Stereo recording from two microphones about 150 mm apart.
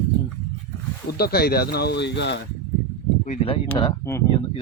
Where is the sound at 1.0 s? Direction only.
90° left.